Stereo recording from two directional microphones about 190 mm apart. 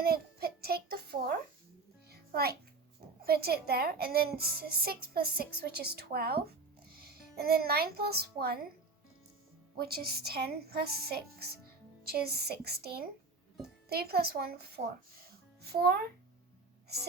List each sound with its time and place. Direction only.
0.0 s a sound: 55° right (ahead or behind)
2.0 s music: 55° right (ahead or behind)
3.2 s a child's voice: 55° right (ahead or behind)
9.7 s speech: 55° right (ahead or behind)